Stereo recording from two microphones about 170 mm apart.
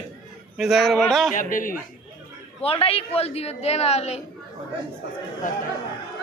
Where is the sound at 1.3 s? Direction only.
50° left (ahead or behind).